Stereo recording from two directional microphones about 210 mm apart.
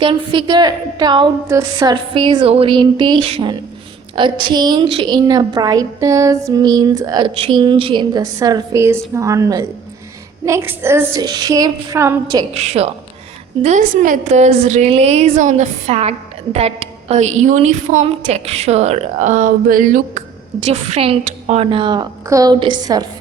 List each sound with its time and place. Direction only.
0.0 s a woman's voice: 25° right (ahead or behind)
12.5 s a woman's voice: 30° right (ahead or behind)
20.7 s a woman's voice: 30° right (ahead or behind)